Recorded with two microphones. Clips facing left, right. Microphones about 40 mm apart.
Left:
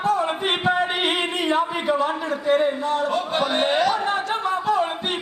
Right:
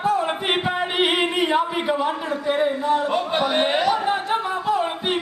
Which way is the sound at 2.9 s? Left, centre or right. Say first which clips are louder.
Right 1 dB; centre.